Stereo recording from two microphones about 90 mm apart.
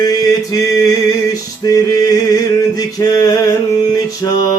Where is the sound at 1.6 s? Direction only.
45° left (ahead or behind).